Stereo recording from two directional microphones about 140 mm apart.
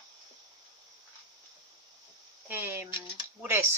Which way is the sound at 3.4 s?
15° right (ahead or behind).